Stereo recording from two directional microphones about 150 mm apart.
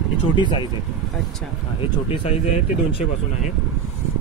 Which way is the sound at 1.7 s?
40° left (ahead or behind).